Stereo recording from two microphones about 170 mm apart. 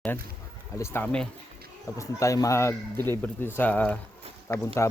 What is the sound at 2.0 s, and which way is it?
Speech, 20° left (ahead or behind).